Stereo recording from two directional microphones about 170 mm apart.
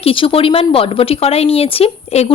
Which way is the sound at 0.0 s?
30° left (ahead or behind).